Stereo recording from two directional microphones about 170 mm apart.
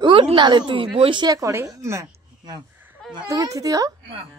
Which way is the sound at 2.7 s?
10° right (ahead or behind).